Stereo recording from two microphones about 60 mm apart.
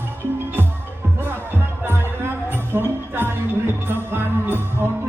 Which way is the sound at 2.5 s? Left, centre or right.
Right.